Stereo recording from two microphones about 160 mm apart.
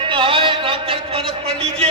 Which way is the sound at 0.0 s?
30° right (ahead or behind).